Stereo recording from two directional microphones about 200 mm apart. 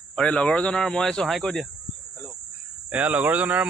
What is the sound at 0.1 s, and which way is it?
A man's voice, 5° left (ahead or behind).